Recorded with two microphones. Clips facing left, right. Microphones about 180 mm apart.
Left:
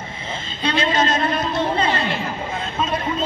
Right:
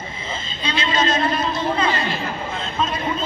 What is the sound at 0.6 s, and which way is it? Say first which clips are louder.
Speech: left 3 dB; 55° left (ahead or behind).